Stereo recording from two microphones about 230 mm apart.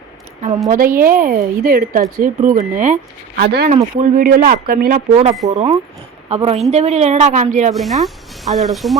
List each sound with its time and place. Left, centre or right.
0.7 s a woman's voice: right
5.1 s a woman's voice: right
7.7 s speech: centre